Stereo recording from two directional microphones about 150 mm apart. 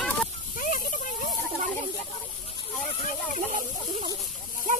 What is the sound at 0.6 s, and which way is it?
Snake, 65° left (ahead or behind).